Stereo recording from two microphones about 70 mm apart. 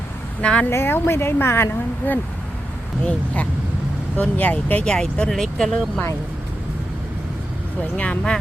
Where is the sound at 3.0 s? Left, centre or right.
Centre.